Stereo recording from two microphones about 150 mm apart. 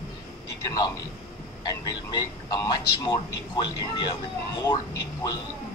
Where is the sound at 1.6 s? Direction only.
25° left (ahead or behind).